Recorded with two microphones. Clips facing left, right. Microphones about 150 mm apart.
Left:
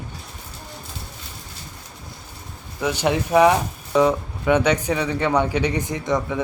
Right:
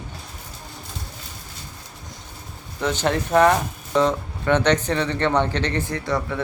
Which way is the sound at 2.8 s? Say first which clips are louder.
Left 1 dB; 10° left (ahead or behind).